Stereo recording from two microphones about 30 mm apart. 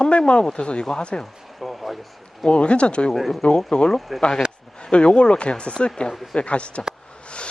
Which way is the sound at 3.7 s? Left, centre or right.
Left.